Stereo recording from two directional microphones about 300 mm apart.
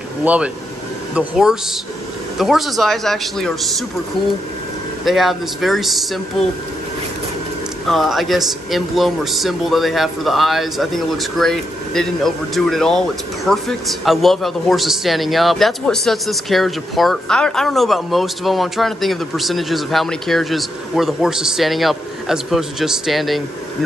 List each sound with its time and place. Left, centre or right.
0.2 s speech: centre
5.0 s speech: centre
7.8 s speech: centre